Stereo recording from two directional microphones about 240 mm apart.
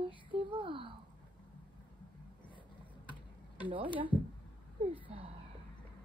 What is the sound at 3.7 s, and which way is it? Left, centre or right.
Speech, right.